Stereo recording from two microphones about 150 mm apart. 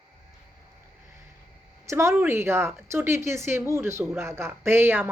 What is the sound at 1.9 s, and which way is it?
Speech, 20° right (ahead or behind).